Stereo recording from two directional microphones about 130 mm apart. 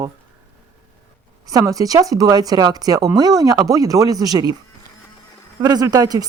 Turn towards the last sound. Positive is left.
turn(degrees=-30)  # may be behind; listen again after turning